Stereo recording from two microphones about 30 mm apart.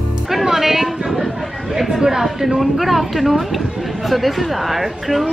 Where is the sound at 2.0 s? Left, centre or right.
Centre.